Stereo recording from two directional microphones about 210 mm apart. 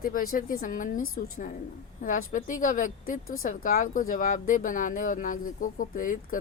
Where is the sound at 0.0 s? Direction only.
45° left (ahead or behind).